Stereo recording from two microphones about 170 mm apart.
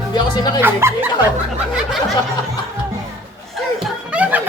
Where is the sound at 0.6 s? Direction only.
10° right (ahead or behind).